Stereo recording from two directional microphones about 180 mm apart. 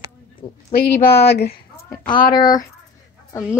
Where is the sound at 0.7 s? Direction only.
60° left (ahead or behind).